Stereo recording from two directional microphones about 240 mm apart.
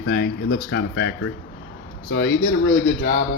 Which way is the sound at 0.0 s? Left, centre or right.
Left.